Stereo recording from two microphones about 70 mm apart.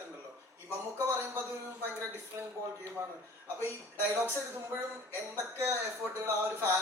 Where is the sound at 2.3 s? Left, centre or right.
Right.